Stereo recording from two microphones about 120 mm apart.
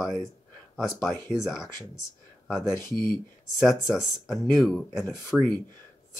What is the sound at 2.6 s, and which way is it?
Speech, 20° left (ahead or behind).